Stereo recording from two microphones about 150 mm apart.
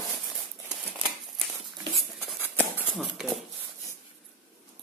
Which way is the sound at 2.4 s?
15° left (ahead or behind).